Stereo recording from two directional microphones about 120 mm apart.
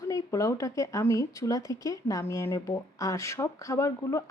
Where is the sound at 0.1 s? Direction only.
25° left (ahead or behind).